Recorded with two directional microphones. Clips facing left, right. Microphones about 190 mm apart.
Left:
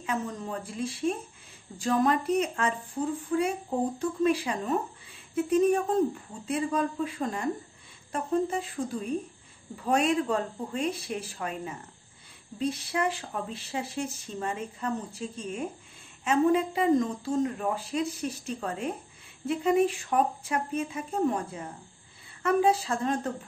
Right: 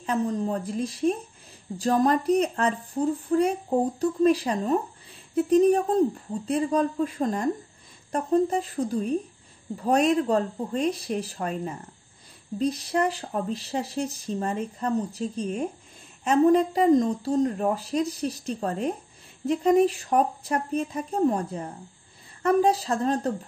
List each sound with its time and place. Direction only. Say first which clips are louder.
0.0 s speech: right 7 dB; 35° right (ahead or behind)